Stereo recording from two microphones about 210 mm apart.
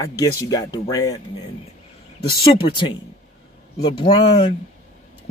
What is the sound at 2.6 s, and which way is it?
A man's voice, 20° left (ahead or behind).